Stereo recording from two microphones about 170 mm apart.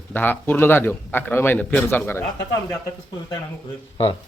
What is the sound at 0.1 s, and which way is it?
A man's voice, 10° left (ahead or behind).